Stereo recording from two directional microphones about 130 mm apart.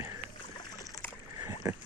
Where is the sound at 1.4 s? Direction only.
25° right (ahead or behind).